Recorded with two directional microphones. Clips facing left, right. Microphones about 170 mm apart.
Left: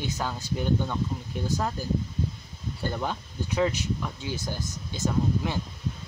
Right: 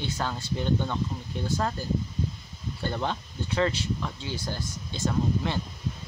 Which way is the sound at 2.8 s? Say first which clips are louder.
Right 1 dB; 10° left (ahead or behind).